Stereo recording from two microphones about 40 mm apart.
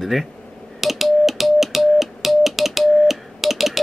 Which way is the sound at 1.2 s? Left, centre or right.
Centre.